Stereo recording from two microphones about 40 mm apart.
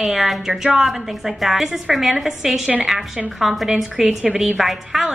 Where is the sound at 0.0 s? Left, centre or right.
Centre.